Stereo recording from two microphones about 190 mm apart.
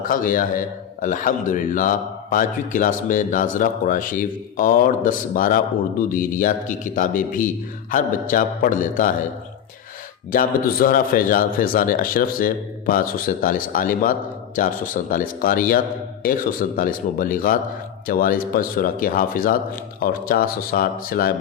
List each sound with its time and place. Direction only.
0.0 s a man's voice: 45° left (ahead or behind)
10.3 s a man's voice: 50° left (ahead or behind)